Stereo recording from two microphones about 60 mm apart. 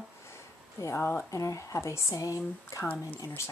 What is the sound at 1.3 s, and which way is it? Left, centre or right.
Speech, left.